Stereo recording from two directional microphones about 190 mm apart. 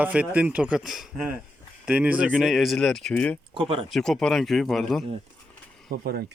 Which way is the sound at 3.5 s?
30° right (ahead or behind).